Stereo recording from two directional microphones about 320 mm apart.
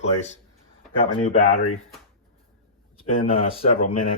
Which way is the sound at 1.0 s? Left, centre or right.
Left.